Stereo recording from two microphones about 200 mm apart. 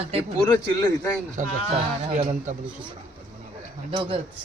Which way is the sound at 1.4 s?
35° right (ahead or behind).